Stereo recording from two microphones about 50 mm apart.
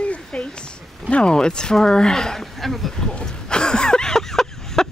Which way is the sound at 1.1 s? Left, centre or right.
Centre.